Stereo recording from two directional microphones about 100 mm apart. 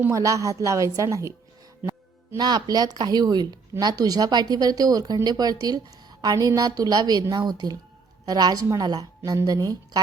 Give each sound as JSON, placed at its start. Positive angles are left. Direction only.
{"t": 0.1, "sound": "speech", "side_deg": -35}
{"t": 2.4, "sound": "speech", "side_deg": -45}